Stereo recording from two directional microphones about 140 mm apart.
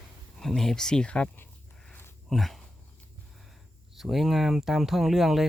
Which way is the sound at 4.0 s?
Centre (ahead or behind).